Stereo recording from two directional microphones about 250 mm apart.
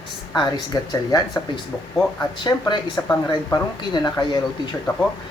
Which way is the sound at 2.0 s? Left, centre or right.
Centre.